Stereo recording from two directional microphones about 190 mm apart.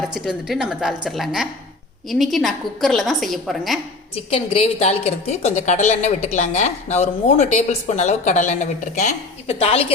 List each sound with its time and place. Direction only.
0.1 s a woman's voice: centre (ahead or behind)
4.1 s a woman's voice: 30° left (ahead or behind)